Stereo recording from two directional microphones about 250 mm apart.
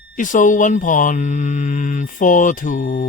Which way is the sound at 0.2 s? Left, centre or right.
Left.